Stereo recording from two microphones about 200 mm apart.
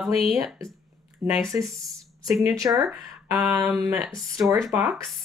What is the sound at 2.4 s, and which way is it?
Speech, 15° right (ahead or behind).